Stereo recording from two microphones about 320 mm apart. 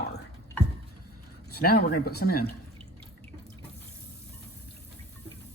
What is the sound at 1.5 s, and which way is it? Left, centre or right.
Speech, left.